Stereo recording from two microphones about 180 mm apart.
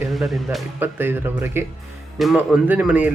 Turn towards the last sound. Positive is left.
turn(degrees=-5)  # may be behind; listen again after turning